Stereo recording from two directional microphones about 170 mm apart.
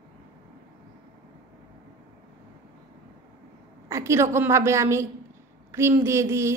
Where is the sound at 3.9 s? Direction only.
15° right (ahead or behind).